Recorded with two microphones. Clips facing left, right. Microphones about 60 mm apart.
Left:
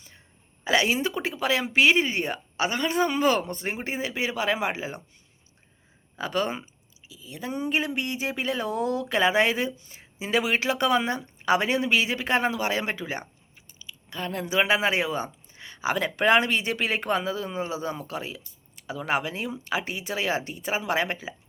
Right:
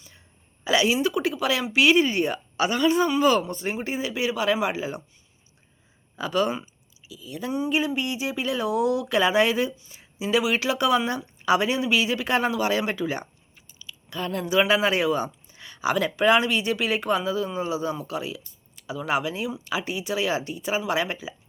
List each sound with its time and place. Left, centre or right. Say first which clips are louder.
0.6 s a woman's voice: right 2 dB; left
6.1 s a woman's voice: right 3 dB; left
7.6 s a woman's voice: right 2 dB; left
9.7 s a woman's voice: right 2 dB; left
13.7 s chewing: right 2 dB; centre
14.2 s a woman's voice: right 3 dB; left